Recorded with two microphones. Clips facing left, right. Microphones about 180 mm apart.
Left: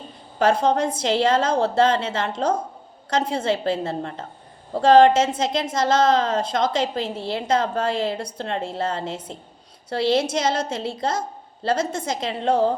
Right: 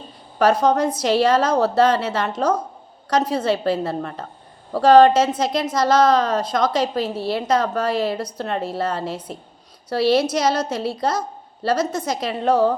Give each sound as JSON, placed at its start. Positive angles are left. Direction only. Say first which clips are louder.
{"t": 0.3, "sound": "a woman's voice", "louder": "right 2 dB", "side_deg": 25}